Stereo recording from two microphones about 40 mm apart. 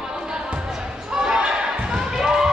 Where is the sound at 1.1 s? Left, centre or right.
Centre.